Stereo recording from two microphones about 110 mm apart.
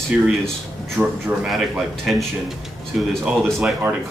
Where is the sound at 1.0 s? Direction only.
20° right (ahead or behind).